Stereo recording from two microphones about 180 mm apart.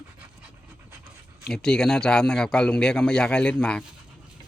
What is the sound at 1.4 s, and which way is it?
Speech, 5° left (ahead or behind).